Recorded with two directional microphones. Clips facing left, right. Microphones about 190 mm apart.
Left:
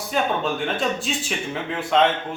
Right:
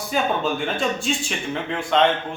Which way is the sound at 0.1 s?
Centre (ahead or behind).